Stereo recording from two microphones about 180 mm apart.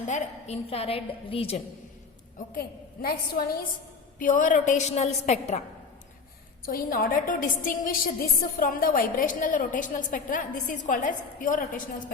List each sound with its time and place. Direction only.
0.0 s a woman's voice: 40° left (ahead or behind)
2.5 s a woman's voice: 55° left (ahead or behind)
4.2 s a woman's voice: 45° left (ahead or behind)
6.7 s a woman's voice: 50° left (ahead or behind)